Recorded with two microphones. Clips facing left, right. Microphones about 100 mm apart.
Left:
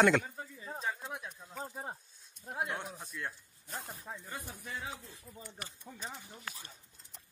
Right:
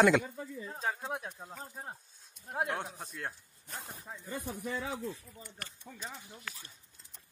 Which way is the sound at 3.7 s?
5° left (ahead or behind).